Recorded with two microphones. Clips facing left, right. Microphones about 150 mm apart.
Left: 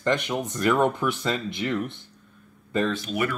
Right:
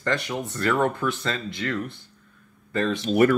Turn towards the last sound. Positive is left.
turn(degrees=-40)  # may be behind; listen again after turning